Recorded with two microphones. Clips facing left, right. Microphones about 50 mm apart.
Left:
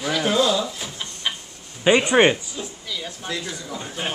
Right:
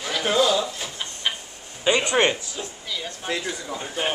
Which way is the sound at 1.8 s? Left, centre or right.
Centre.